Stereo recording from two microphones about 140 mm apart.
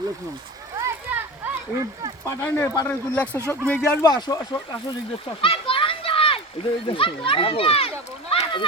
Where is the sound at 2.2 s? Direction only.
15° left (ahead or behind).